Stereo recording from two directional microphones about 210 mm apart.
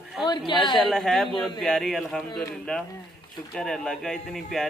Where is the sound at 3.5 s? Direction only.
5° left (ahead or behind).